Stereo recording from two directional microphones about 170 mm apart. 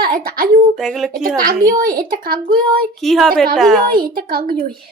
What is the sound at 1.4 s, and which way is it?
Speech, 55° right (ahead or behind).